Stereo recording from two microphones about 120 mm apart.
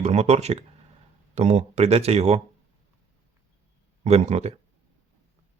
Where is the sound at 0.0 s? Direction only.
65° right (ahead or behind).